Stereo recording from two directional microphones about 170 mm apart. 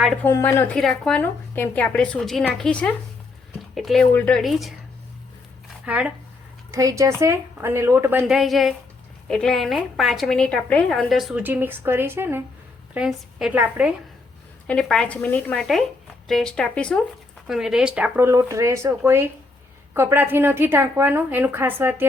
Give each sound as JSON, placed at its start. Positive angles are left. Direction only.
{"t": 0.0, "sound": "a woman's voice", "side_deg": 5}
{"t": 0.3, "sound": "a woman's voice", "side_deg": 15}
{"t": 0.8, "sound": "a woman's voice", "side_deg": 0}
{"t": 5.8, "sound": "speech", "side_deg": -10}
{"t": 6.7, "sound": "a woman's voice", "side_deg": -20}
{"t": 8.3, "sound": "a woman's voice", "side_deg": 0}
{"t": 14.7, "sound": "a woman's voice", "side_deg": 5}